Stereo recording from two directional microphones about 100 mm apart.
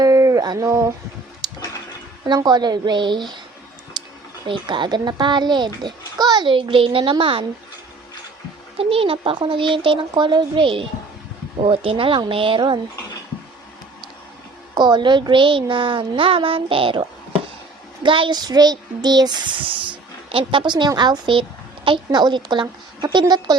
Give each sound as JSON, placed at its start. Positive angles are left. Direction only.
{"t": 0.0, "sound": "a sound", "side_deg": -35}
{"t": 1.4, "sound": "a sound", "side_deg": -45}
{"t": 2.2, "sound": "speech", "side_deg": -45}
{"t": 4.0, "sound": "a sound", "side_deg": -50}
{"t": 4.4, "sound": "speech", "side_deg": -55}
{"t": 8.8, "sound": "speech", "side_deg": -70}
{"t": 11.6, "sound": "speech", "side_deg": -70}
{"t": 12.5, "sound": "speech", "side_deg": -50}
{"t": 14.8, "sound": "speech", "side_deg": -50}
{"t": 18.3, "sound": "speech", "side_deg": -40}